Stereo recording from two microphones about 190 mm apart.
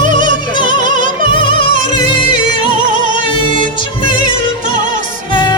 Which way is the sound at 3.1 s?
25° left (ahead or behind).